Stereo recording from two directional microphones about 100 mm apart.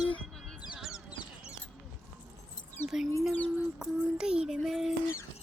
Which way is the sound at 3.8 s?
10° right (ahead or behind).